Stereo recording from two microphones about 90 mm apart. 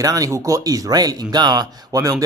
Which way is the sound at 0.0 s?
40° right (ahead or behind).